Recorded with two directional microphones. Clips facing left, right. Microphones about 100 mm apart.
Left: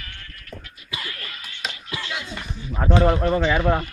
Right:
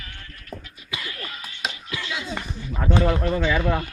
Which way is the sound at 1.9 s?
30° left (ahead or behind).